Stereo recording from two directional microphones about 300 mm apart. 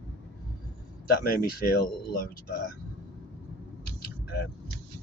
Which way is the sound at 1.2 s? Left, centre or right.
Left.